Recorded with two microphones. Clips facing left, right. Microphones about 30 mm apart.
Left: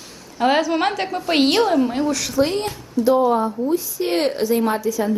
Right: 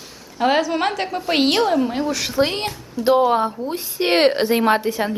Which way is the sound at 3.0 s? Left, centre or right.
Right.